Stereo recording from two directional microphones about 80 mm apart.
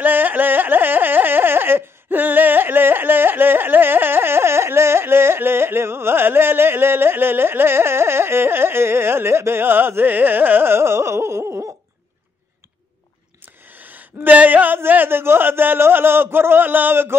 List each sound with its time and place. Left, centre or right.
0.0 s carnatic music: right
13.7 s speech: right